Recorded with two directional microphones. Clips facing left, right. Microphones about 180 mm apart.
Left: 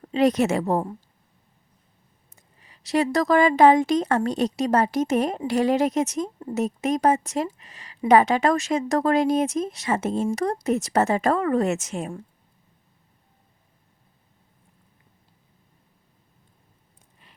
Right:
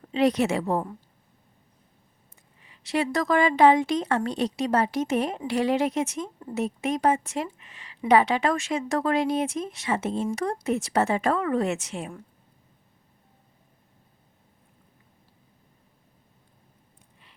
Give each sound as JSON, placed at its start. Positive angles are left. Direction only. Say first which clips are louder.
{"t": 0.1, "sound": "a woman's voice", "louder": "left 2 dB", "side_deg": 45}
{"t": 2.3, "sound": "a woman's voice", "louder": "left 2 dB", "side_deg": 40}